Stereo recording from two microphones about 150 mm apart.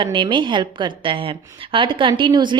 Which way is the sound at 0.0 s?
35° right (ahead or behind).